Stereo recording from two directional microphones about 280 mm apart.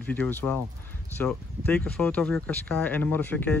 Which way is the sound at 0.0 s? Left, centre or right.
Centre.